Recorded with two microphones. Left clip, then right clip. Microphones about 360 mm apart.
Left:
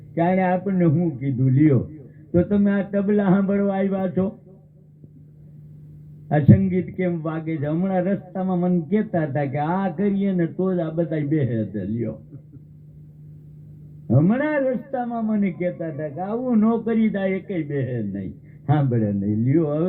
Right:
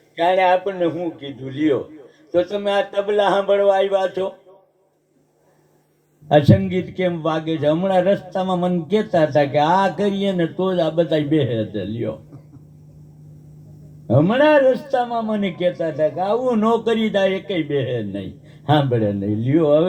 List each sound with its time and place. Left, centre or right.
0.2 s a man's voice: right
6.2 s a man's voice: right
14.1 s a man's voice: right